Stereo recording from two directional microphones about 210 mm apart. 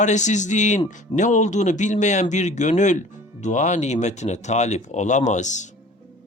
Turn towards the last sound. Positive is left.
turn(degrees=35)  # may be behind; listen again after turning